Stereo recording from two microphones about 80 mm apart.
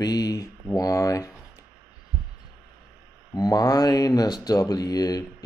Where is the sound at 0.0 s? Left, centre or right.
Left.